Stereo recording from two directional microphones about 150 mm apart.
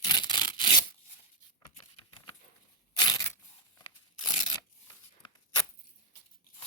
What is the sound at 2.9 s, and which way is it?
Crushing, 25° left (ahead or behind).